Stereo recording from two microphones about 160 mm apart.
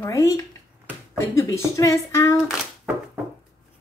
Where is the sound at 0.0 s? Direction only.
20° left (ahead or behind).